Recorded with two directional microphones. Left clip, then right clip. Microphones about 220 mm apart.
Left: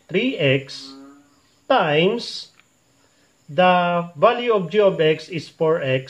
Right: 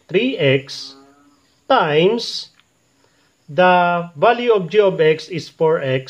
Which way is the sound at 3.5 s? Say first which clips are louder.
Right 3 dB; 30° right (ahead or behind).